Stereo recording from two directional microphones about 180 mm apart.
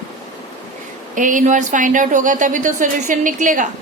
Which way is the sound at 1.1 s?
45° right (ahead or behind).